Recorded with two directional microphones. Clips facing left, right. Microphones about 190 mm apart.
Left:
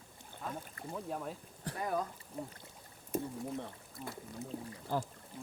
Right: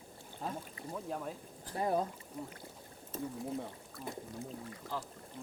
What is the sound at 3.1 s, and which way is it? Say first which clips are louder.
Speech: left 3 dB; 10° left (ahead or behind).